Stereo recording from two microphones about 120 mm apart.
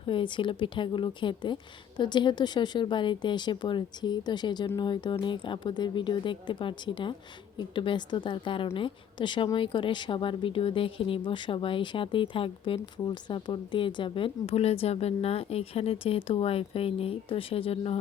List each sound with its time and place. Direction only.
0.0 s a woman's voice: 45° left (ahead or behind)